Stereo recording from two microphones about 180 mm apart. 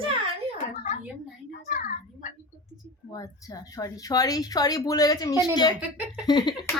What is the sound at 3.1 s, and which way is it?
Speech, 20° left (ahead or behind).